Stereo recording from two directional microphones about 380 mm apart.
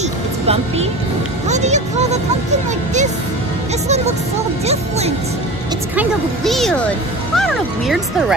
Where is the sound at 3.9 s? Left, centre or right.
Centre.